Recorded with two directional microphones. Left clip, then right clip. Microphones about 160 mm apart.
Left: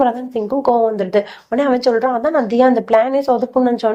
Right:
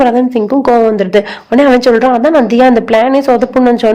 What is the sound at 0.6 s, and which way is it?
A woman's voice, 35° right (ahead or behind).